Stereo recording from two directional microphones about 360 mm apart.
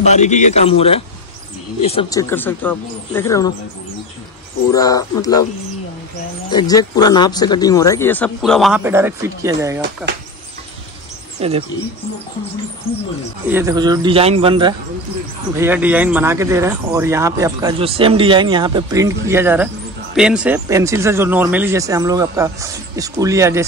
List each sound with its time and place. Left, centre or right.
0.0 s a man's voice: centre
4.6 s speech: centre
6.5 s speech: centre
11.4 s speech: centre
12.9 s speech: centre
13.5 s speech: centre